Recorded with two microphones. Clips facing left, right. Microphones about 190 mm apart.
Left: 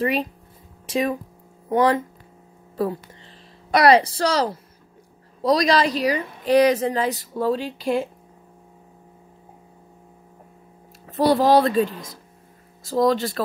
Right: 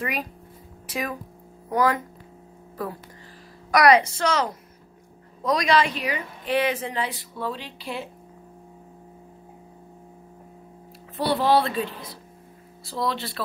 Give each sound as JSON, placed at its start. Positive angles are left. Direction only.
{"t": 0.0, "sound": "a woman's voice", "side_deg": 30}
{"t": 11.1, "sound": "a woman's voice", "side_deg": 40}